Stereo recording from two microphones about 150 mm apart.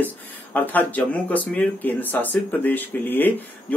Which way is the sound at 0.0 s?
10° left (ahead or behind).